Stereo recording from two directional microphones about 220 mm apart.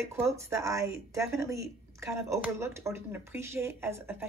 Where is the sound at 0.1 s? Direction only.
10° right (ahead or behind).